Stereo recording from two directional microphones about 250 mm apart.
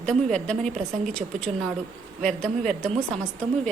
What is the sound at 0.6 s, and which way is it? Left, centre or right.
Speech, right.